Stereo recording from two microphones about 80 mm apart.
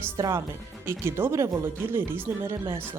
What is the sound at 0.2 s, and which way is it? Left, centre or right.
Speech, right.